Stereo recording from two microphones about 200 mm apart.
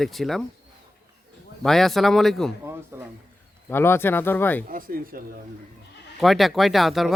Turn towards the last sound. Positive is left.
turn(degrees=0)  # may be behind; listen again after turning